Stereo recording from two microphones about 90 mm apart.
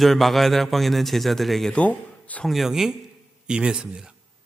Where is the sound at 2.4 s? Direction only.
Centre (ahead or behind).